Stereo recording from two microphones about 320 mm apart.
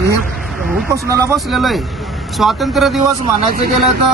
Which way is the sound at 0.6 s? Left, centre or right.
Centre.